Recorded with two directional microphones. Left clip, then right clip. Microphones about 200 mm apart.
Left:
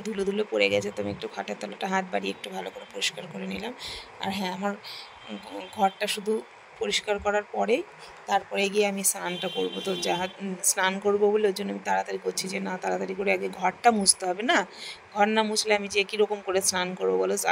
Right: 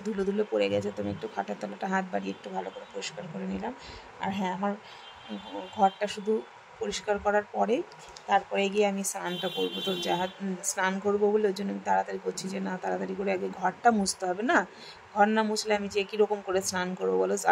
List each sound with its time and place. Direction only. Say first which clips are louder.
0.0 s speech: left 1 dB; 20° left (ahead or behind)
5.9 s speech: left 1 dB; 25° left (ahead or behind)
8.3 s a woman's voice: even; centre (ahead or behind)
8.5 s speech: left 1 dB; 30° left (ahead or behind)